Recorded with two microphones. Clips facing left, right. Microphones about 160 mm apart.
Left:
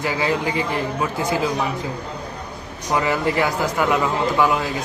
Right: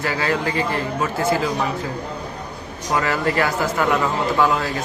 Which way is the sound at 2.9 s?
15° left (ahead or behind).